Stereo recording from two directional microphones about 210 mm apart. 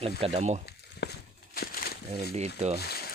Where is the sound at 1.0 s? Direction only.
55° left (ahead or behind).